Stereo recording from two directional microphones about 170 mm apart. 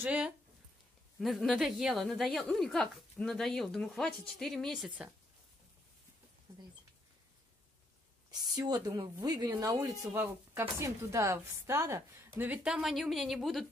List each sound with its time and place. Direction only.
0.0 s a woman's voice: 5° right (ahead or behind)
8.3 s speech: 25° right (ahead or behind); by 13.7 s centre (ahead or behind)